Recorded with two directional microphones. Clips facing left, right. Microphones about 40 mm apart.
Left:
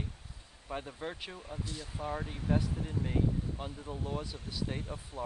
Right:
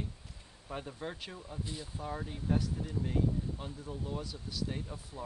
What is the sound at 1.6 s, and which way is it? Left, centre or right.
Speech, centre.